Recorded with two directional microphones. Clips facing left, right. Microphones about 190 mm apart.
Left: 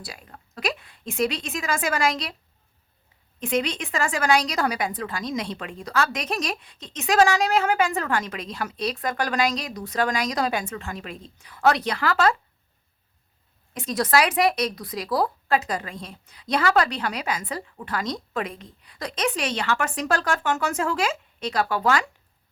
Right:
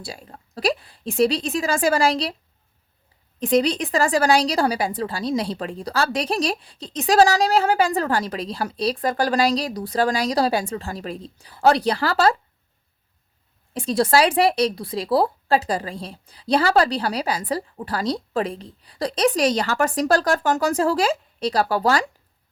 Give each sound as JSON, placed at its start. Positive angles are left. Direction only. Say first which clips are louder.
{"t": 0.0, "sound": "a woman's voice", "louder": "right 5 dB", "side_deg": -30}
{"t": 3.4, "sound": "a woman's voice", "louder": "right 6 dB", "side_deg": -35}
{"t": 13.7, "sound": "a woman's voice", "louder": "right 4 dB", "side_deg": -30}